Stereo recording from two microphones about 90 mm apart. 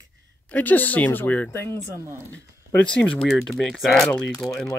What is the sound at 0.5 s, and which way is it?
Speech, 15° left (ahead or behind).